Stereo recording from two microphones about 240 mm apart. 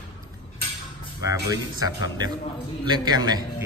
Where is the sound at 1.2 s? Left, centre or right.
Centre.